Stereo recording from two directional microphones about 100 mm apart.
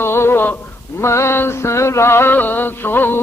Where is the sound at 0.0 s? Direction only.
25° left (ahead or behind).